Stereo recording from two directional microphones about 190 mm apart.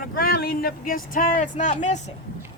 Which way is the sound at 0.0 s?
50° left (ahead or behind).